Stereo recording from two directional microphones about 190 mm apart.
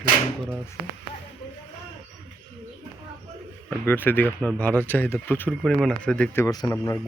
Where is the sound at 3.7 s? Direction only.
10° left (ahead or behind).